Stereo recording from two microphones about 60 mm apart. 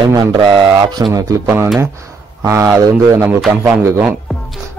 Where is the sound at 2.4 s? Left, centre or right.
Right.